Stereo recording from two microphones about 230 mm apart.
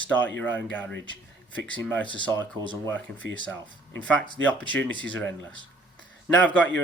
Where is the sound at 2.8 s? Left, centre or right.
Centre.